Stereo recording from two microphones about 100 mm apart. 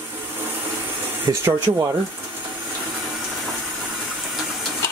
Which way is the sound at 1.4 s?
25° right (ahead or behind).